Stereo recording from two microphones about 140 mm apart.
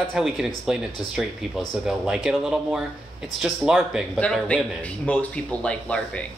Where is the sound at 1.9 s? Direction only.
5° right (ahead or behind).